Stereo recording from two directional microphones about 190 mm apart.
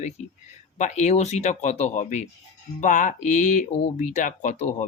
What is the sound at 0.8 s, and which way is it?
Speech, 40° left (ahead or behind).